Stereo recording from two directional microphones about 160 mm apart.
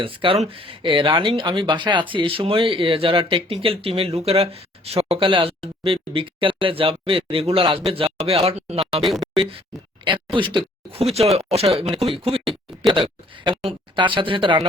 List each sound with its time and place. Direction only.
0.0 s speech: 35° right (ahead or behind)